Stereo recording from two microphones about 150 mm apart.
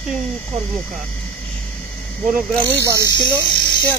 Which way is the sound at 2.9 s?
20° right (ahead or behind).